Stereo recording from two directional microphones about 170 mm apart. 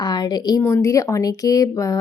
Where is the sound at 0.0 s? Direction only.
25° left (ahead or behind).